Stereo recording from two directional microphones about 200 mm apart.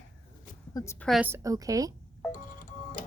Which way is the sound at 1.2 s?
15° right (ahead or behind).